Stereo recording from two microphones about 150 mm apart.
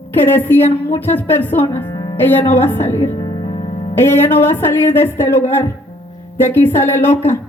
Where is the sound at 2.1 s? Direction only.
15° left (ahead or behind).